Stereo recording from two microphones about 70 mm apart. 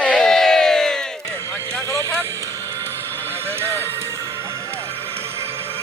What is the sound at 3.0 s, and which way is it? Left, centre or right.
Horse, left.